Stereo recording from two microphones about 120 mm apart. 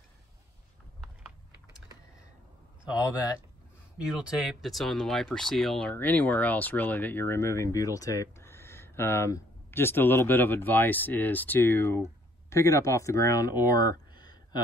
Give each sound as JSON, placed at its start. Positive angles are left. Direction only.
{"t": 4.1, "sound": "speech", "side_deg": -5}